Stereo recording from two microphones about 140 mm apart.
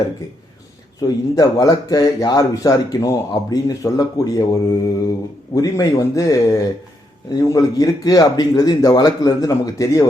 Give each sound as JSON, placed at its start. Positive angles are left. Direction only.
{"t": 1.0, "sound": "speech", "side_deg": 25}